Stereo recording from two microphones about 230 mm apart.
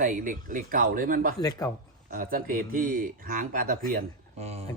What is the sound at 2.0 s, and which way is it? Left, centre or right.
A man's voice, right.